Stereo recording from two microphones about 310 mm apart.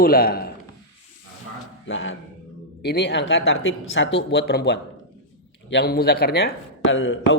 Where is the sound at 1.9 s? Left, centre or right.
Left.